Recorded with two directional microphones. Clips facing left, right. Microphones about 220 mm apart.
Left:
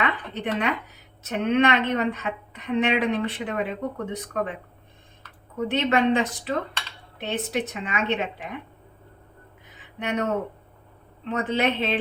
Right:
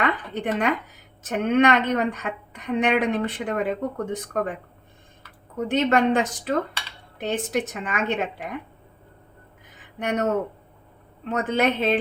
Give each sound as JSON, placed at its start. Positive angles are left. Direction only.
{"t": 0.0, "sound": "a woman's voice", "side_deg": -50}
{"t": 5.6, "sound": "a woman's voice", "side_deg": -50}
{"t": 10.0, "sound": "a woman's voice", "side_deg": -45}
{"t": 11.3, "sound": "a woman's voice", "side_deg": -50}